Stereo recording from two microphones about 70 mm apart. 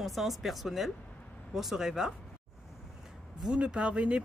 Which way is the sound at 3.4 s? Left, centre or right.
Centre.